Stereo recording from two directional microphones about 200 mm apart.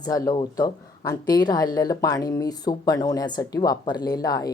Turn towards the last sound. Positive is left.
turn(degrees=20)  # may be behind; listen again after turning